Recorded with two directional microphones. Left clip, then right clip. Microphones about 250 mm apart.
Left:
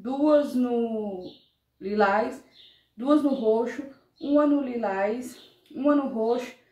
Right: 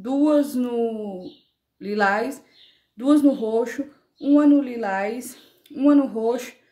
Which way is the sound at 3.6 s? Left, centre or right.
Right.